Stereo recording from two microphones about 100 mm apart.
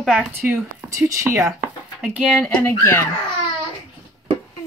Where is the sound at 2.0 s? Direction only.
10° right (ahead or behind).